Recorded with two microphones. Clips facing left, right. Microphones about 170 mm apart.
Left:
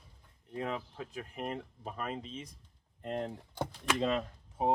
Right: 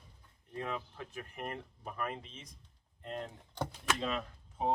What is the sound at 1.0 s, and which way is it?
Speech, 10° left (ahead or behind).